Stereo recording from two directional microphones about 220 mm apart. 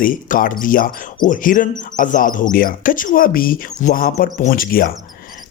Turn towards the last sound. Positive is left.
turn(degrees=40)  # may be behind; listen again after turning